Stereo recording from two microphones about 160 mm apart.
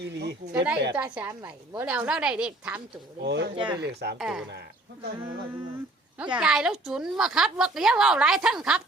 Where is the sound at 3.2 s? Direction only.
90° right.